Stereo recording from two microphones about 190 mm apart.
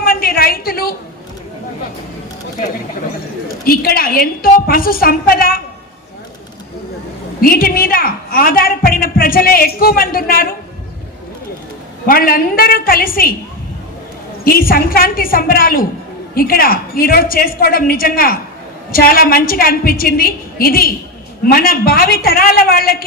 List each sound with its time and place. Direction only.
0.0 s a sound: 50° left (ahead or behind)
3.7 s a woman's voice: 50° left (ahead or behind)
7.4 s a woman's voice: 50° left (ahead or behind)
12.0 s a woman's voice: 50° left (ahead or behind)
14.4 s a woman's voice: 50° left (ahead or behind)